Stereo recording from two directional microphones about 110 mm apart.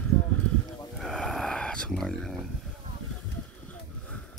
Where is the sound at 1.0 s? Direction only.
5° left (ahead or behind).